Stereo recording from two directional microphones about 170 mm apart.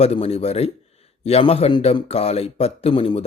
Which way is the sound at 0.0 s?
35° left (ahead or behind).